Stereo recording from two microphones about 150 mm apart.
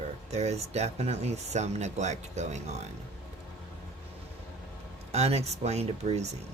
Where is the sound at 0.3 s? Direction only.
45° right (ahead or behind).